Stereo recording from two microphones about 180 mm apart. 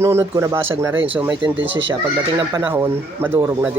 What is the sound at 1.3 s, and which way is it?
Speech, 25° right (ahead or behind).